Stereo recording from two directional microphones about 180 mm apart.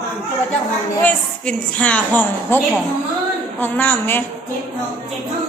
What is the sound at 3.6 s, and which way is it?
Speech, 10° left (ahead or behind).